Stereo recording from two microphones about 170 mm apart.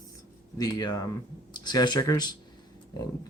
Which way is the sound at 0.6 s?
25° left (ahead or behind).